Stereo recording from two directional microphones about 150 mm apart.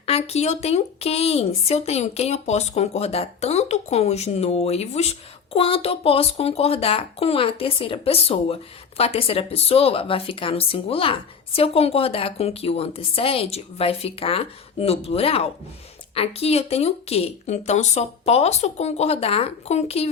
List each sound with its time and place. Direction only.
0.0 s speech: 45° left (ahead or behind)